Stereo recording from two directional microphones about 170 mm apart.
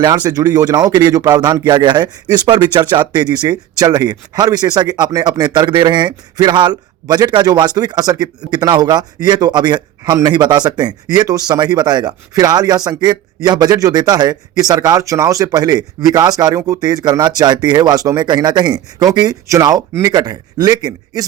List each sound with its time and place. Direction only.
0.0 s a man's voice: 20° right (ahead or behind)